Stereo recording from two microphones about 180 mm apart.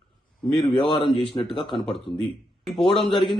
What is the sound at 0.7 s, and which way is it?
Speech, 25° left (ahead or behind).